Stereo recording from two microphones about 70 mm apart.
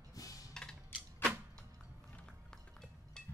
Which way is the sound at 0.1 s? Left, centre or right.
Left.